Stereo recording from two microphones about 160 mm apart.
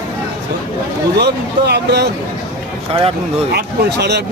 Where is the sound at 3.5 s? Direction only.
90° right.